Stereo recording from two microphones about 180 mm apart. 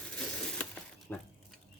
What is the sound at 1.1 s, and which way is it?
Speech, 10° left (ahead or behind).